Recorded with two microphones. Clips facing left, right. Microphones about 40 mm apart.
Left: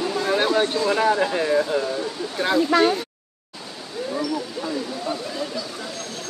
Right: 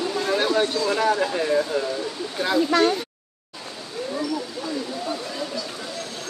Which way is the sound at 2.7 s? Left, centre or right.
Centre.